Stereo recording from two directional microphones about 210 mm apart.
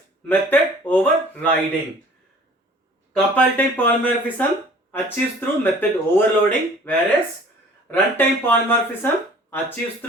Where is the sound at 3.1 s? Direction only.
5° left (ahead or behind).